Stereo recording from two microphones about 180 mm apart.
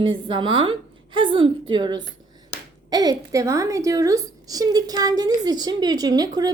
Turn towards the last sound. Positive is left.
turn(degrees=-20)  # may be behind; listen again after turning